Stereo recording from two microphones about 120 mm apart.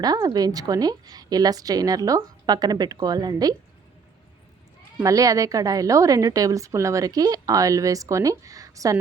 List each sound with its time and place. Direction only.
0.0 s a woman's voice: 35° right (ahead or behind)
5.0 s a woman's voice: 30° right (ahead or behind)